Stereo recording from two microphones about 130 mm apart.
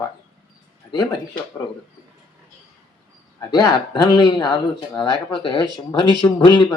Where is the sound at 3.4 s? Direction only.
30° left (ahead or behind).